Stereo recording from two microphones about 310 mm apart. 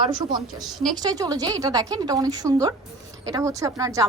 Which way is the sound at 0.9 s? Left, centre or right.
Centre.